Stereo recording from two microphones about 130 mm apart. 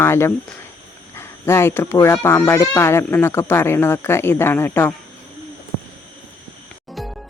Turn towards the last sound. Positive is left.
turn(degrees=0)  # may be behind; listen again after turning